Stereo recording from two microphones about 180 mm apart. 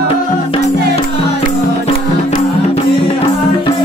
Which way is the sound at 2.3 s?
35° left (ahead or behind).